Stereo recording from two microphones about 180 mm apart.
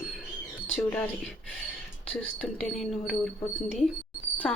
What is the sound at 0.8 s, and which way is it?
A woman's voice, 5° left (ahead or behind).